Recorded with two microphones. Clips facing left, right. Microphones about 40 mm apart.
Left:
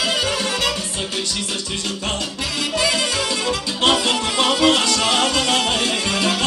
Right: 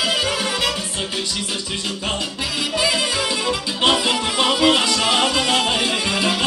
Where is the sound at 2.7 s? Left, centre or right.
Centre.